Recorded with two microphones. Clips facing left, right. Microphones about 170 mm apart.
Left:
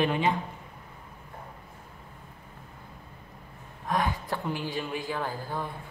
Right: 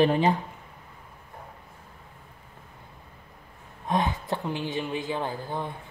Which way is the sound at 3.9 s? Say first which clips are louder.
Right 2 dB; 20° right (ahead or behind).